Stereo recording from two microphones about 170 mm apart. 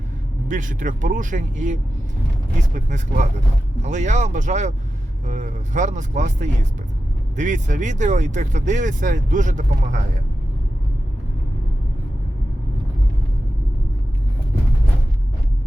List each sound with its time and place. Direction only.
0.4 s speech: 50° right (ahead or behind)